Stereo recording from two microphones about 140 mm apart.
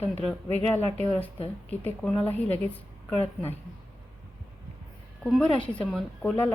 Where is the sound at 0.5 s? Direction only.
15° left (ahead or behind).